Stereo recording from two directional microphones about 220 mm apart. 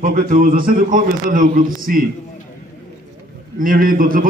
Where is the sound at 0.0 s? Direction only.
40° right (ahead or behind).